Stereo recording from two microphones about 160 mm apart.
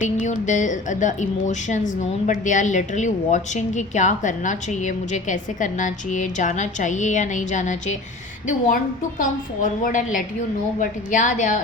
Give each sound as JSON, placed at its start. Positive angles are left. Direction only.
{"t": 0.0, "sound": "a woman's voice", "side_deg": 50}